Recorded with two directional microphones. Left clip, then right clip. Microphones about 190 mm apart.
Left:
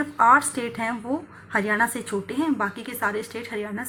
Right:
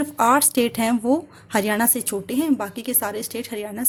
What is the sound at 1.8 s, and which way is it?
A woman's voice, 90° right.